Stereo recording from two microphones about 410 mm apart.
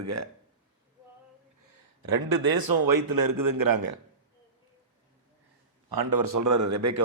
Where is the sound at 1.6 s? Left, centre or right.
Right.